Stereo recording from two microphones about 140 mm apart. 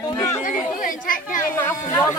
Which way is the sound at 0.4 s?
75° left (ahead or behind).